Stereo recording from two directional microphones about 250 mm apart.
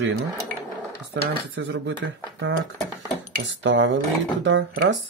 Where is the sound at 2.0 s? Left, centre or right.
Right.